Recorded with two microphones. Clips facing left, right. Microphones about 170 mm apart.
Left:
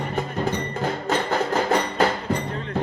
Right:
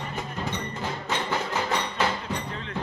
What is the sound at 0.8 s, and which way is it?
Music, 50° left (ahead or behind).